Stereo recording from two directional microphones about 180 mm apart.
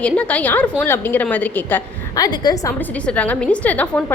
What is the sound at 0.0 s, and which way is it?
A woman's voice, 5° left (ahead or behind).